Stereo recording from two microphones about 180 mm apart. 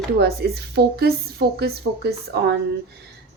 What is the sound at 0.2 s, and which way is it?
A woman's voice, 65° right (ahead or behind).